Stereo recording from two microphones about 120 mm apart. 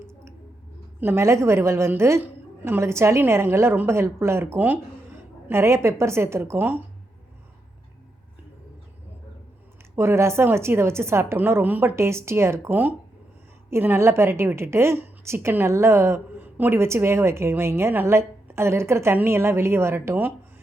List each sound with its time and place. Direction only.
1.0 s a woman's voice: 20° right (ahead or behind)
9.9 s a woman's voice: 20° right (ahead or behind)